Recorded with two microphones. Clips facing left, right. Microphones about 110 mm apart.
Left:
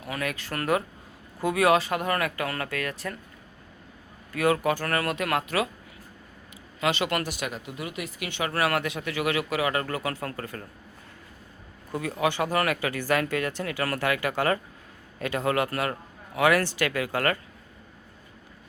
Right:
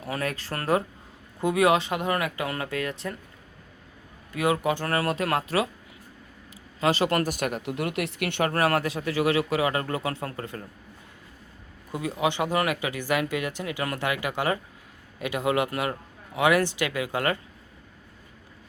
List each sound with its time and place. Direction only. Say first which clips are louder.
0.0 s speech: right 2 dB; 30° right (ahead or behind)
4.3 s speech: left 1 dB; 20° right (ahead or behind)
6.5 s a man's voice: right 2 dB; 35° right (ahead or behind); by 7.6 s 50° right (ahead or behind)
7.6 s speech: right 6 dB; 65° right (ahead or behind)
8.4 s speech: right 1 dB; 40° right (ahead or behind)
11.9 s speech: even; 20° right (ahead or behind)